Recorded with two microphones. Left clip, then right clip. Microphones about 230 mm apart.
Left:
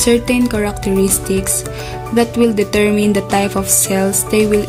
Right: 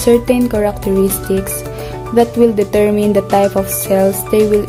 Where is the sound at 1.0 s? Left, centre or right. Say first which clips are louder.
Right 1 dB; centre.